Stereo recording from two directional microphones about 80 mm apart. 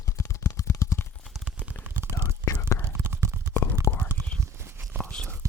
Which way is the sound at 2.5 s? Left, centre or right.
Left.